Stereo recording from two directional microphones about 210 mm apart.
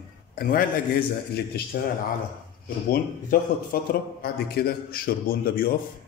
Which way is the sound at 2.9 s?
45° left (ahead or behind).